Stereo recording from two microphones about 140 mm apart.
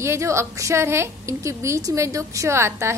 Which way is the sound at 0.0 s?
20° right (ahead or behind).